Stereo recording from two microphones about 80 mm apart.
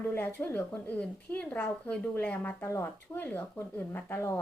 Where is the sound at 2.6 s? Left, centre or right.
Left.